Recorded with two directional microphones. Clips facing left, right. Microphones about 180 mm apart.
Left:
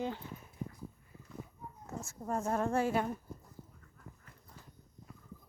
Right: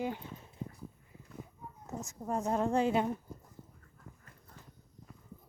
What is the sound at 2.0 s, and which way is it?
Speech, 15° right (ahead or behind).